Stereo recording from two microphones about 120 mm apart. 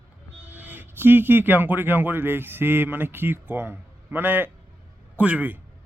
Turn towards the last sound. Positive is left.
turn(degrees=-15)  # may be behind; listen again after turning